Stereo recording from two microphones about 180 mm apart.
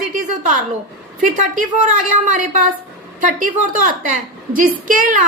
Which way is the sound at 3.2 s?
45° right (ahead or behind).